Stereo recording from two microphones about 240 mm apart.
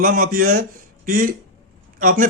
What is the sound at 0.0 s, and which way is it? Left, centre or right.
A man's voice, right.